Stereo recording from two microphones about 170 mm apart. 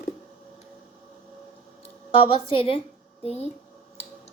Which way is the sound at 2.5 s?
30° left (ahead or behind).